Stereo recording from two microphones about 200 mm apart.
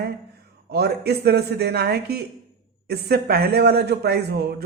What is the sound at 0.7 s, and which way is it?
Speech, 55° right (ahead or behind).